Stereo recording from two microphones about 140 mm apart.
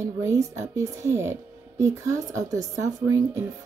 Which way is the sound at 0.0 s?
20° right (ahead or behind).